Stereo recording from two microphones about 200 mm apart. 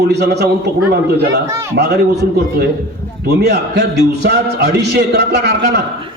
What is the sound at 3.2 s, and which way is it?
A man's voice, 55° right (ahead or behind).